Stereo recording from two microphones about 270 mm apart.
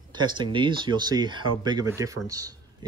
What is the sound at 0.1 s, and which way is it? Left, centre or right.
Speech, centre.